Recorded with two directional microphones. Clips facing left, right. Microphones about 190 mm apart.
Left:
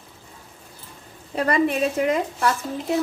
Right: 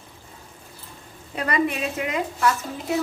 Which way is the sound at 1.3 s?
40° left (ahead or behind).